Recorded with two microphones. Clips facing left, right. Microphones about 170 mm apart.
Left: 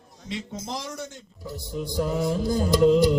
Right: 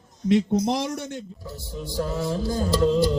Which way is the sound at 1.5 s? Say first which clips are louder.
Left 7 dB; 15° left (ahead or behind).